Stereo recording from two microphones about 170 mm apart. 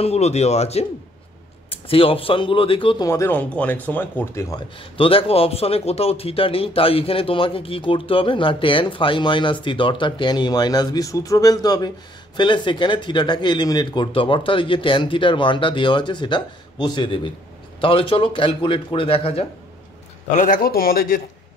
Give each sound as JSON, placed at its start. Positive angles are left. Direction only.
{"t": 0.0, "sound": "a man's voice", "side_deg": 40}
{"t": 3.1, "sound": "speech", "side_deg": 15}
{"t": 4.7, "sound": "a man's voice", "side_deg": 30}
{"t": 20.3, "sound": "a man's voice", "side_deg": 50}